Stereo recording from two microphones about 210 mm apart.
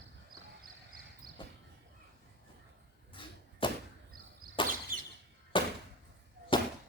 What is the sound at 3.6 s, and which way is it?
Arrow, 25° left (ahead or behind).